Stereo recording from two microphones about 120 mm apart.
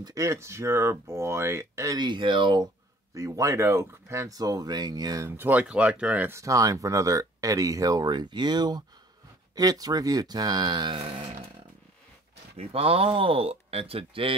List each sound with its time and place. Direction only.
0.0 s speech: 30° right (ahead or behind); by 2.6 s 45° right (ahead or behind)
3.2 s speech: 25° right (ahead or behind)
5.4 s speech: 15° right (ahead or behind); by 11.0 s 40° right (ahead or behind)
12.5 s speech: 55° right (ahead or behind)